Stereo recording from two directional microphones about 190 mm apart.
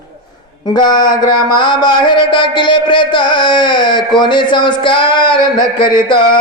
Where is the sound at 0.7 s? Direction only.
20° left (ahead or behind).